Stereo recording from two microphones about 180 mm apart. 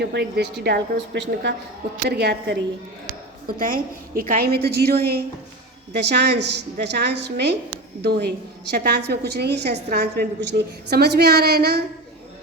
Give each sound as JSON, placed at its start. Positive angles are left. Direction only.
{"t": 0.0, "sound": "a woman's voice", "side_deg": -65}
{"t": 3.4, "sound": "a woman's voice", "side_deg": -50}